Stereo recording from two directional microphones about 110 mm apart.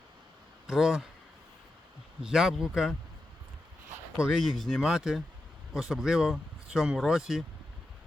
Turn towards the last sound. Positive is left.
turn(degrees=-5)  # may be behind; listen again after turning